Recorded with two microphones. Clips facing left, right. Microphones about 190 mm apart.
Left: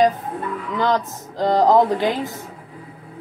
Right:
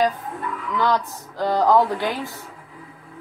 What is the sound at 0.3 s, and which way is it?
Music, 35° left (ahead or behind).